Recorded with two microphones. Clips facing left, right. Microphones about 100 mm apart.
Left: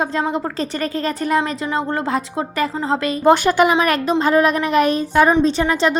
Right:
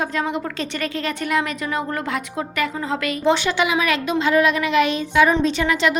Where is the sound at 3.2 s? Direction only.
50° left (ahead or behind).